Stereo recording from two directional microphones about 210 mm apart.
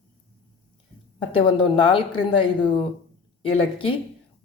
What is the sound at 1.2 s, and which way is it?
Speech, 25° left (ahead or behind).